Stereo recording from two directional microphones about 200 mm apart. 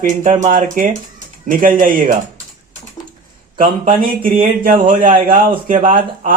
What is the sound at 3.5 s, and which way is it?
A man's voice, 40° right (ahead or behind).